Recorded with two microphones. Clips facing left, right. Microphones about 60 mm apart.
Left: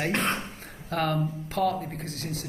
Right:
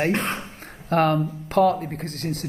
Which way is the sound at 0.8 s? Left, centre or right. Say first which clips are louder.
Right 7 dB; right.